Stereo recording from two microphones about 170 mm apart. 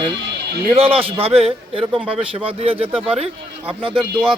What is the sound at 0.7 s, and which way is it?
A man's voice, 35° right (ahead or behind).